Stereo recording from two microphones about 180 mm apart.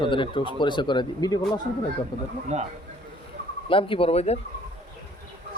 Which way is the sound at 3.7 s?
30° left (ahead or behind).